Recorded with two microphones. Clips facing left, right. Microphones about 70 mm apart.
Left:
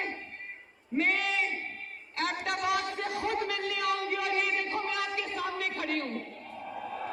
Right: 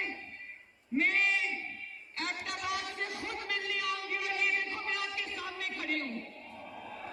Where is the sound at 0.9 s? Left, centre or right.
Left.